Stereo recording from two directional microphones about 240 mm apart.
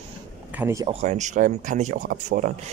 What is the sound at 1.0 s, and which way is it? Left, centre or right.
Speech, right.